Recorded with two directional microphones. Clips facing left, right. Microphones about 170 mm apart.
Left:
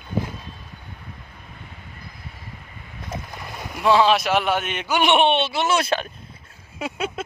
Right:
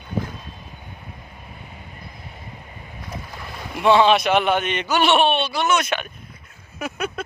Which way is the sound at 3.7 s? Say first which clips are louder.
Right 2 dB; centre (ahead or behind).